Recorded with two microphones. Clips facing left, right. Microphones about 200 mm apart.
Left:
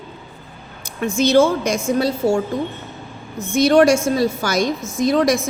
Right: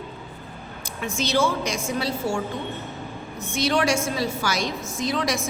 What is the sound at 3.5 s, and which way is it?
A woman's voice, 45° left (ahead or behind).